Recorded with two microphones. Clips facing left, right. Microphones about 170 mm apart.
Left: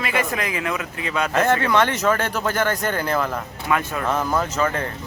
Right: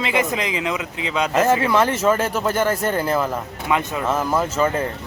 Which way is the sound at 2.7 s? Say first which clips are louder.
Right 3 dB; 30° right (ahead or behind).